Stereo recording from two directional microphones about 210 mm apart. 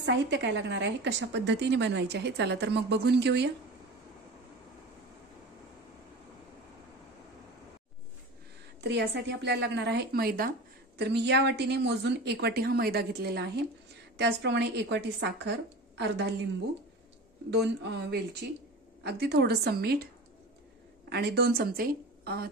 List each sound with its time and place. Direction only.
0.0 s a woman's voice: 55° right (ahead or behind)
8.8 s speech: 55° right (ahead or behind)
17.5 s speech: 55° right (ahead or behind)
21.1 s a woman's voice: 50° right (ahead or behind)